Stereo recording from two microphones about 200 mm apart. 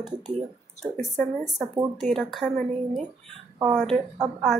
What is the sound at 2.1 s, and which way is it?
Speech, centre (ahead or behind).